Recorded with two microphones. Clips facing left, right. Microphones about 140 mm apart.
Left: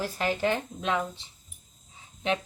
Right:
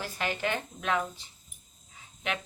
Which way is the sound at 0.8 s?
20° left (ahead or behind).